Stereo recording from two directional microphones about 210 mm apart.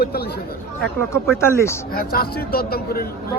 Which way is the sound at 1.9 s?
45° left (ahead or behind).